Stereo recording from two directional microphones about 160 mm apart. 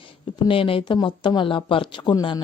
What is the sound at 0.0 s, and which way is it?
Speech, 35° left (ahead or behind).